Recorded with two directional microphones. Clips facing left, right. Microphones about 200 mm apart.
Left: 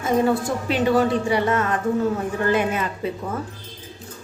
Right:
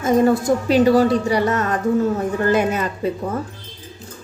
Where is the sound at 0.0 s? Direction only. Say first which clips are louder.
Right 4 dB; 40° right (ahead or behind).